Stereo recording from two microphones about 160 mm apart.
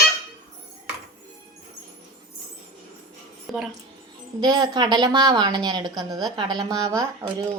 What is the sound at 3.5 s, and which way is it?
Speech, centre (ahead or behind).